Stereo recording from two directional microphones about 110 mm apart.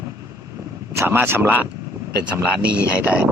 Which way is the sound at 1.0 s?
20° right (ahead or behind).